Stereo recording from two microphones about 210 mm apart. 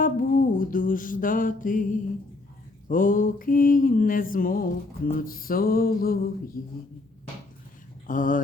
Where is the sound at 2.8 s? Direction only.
40° left (ahead or behind).